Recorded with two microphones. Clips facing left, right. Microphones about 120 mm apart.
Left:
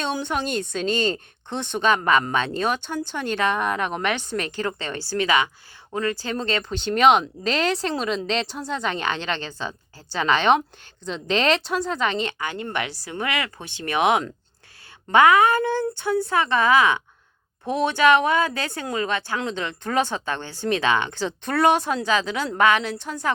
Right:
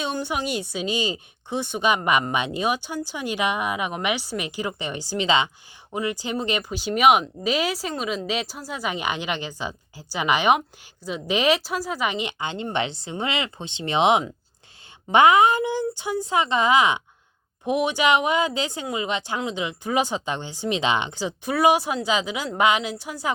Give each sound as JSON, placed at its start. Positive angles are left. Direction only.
{"t": 0.0, "sound": "speech", "side_deg": -5}